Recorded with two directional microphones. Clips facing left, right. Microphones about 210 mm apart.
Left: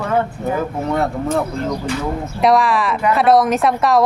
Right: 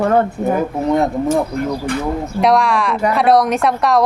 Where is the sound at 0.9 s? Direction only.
15° right (ahead or behind).